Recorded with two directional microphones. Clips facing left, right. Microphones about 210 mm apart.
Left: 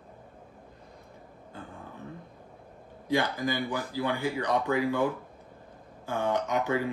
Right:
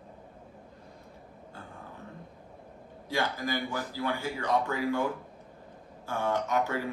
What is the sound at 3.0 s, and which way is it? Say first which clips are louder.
Speech: left 4 dB; 15° left (ahead or behind).